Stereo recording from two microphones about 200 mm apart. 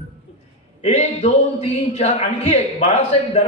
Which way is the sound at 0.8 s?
35° left (ahead or behind).